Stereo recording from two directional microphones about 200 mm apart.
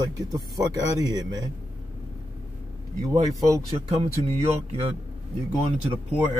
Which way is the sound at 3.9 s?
30° right (ahead or behind).